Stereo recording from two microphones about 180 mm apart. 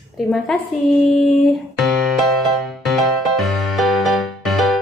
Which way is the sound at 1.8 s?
Centre (ahead or behind).